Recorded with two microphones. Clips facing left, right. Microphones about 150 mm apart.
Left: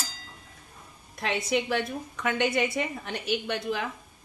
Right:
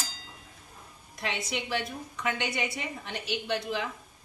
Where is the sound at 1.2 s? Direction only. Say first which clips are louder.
Left 6 dB; 50° left (ahead or behind).